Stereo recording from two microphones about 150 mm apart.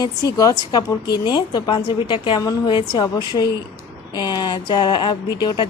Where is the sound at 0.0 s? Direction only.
25° left (ahead or behind).